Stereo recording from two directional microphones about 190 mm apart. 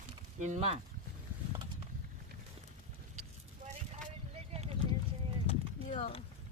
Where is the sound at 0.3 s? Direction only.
40° right (ahead or behind).